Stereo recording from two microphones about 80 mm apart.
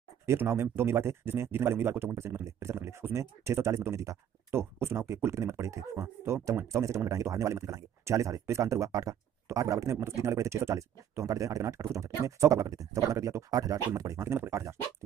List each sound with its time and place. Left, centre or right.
0.3 s speech: right